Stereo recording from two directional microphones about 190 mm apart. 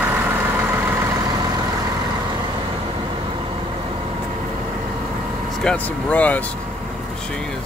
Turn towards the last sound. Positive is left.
turn(degrees=10)  # may be behind; listen again after turning